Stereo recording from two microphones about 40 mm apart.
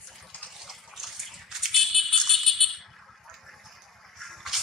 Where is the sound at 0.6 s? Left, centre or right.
Centre.